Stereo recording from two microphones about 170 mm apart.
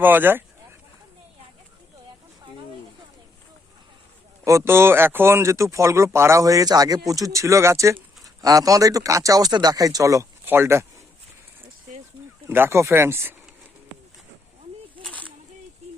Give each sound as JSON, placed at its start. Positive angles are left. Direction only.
{"t": 0.0, "sound": "speech", "side_deg": -10}
{"t": 4.4, "sound": "a man's voice", "side_deg": -15}
{"t": 12.5, "sound": "speech", "side_deg": -15}
{"t": 15.0, "sound": "a sound", "side_deg": 10}